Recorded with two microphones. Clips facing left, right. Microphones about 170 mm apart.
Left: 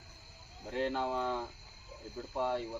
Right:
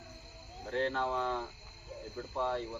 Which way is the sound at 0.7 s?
10° left (ahead or behind).